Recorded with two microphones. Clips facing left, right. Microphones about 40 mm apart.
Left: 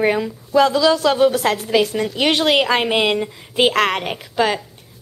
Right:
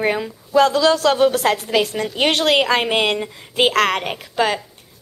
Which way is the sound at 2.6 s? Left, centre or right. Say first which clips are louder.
Even; centre.